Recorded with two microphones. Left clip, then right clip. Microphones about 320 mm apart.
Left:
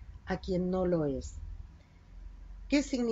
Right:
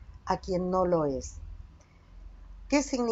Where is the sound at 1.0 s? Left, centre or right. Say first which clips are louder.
Right 4 dB; right.